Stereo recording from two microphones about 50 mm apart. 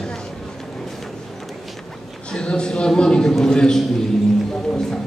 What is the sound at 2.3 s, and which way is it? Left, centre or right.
A man's voice, centre.